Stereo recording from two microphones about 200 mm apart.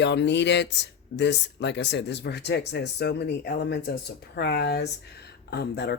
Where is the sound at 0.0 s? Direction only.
60° left (ahead or behind).